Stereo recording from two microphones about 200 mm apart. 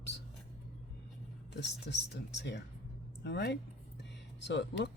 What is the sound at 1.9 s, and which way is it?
Speech, 60° left (ahead or behind).